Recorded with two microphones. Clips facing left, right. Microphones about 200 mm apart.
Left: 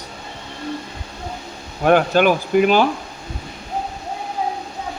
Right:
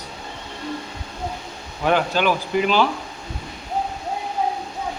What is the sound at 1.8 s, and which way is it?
Speech, 50° left (ahead or behind).